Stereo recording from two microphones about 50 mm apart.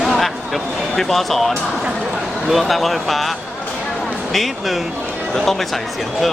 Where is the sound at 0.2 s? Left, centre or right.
Centre.